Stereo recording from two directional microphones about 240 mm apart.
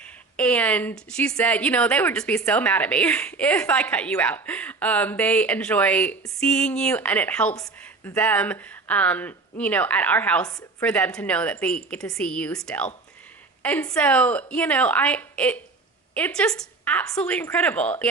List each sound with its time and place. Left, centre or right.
0.0 s speech: centre